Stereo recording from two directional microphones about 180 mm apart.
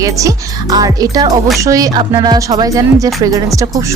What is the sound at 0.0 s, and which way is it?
Speech, 20° right (ahead or behind).